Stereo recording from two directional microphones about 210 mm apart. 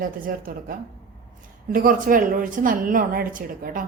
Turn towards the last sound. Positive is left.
turn(degrees=-40)  # may be behind; listen again after turning